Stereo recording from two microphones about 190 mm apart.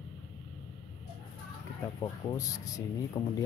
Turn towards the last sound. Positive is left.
turn(degrees=20)  # may be behind; listen again after turning